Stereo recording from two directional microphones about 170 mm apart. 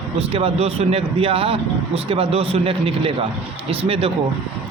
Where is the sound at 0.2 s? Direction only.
35° right (ahead or behind).